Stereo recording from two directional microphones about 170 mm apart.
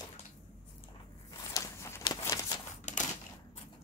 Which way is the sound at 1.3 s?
20° left (ahead or behind).